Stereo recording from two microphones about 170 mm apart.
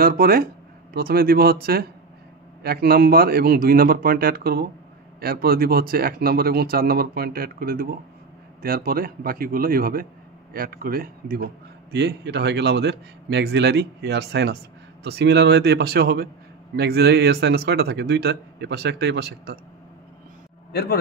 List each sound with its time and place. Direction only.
0.0 s speech: 60° right (ahead or behind)
11.9 s a man's voice: 85° right; by 19.6 s 65° right (ahead or behind)
20.7 s a man's voice: 70° left (ahead or behind)